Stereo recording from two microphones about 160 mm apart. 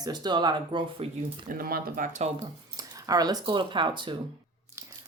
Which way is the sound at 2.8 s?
20° right (ahead or behind).